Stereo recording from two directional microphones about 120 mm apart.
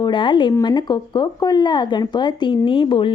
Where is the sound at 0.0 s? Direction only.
40° left (ahead or behind).